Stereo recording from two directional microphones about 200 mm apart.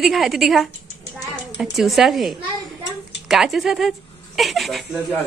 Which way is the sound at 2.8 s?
60° left (ahead or behind).